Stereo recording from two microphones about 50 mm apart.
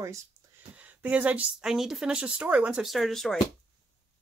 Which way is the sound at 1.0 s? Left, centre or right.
Right.